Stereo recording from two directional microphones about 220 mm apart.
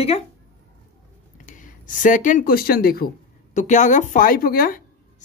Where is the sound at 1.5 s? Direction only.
35° left (ahead or behind).